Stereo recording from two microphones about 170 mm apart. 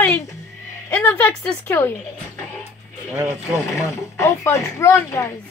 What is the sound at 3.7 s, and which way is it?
A woman's voice, 20° left (ahead or behind).